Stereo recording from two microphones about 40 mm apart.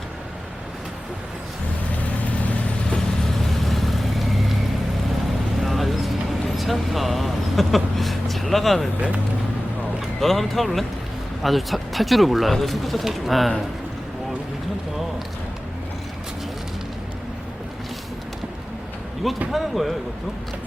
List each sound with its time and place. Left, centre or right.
2.9 s vehicle: centre
5.6 s vehicle: centre
6.5 s a sound: centre
10.2 s speech: centre
19.5 s speech: centre